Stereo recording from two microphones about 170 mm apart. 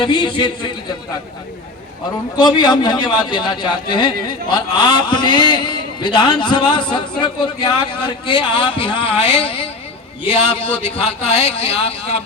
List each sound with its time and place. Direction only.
0.0 s a man's voice: 30° left (ahead or behind)
2.4 s a man's voice: 25° left (ahead or behind)